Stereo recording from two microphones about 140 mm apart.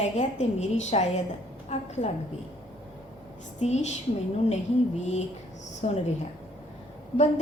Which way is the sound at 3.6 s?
55° left (ahead or behind).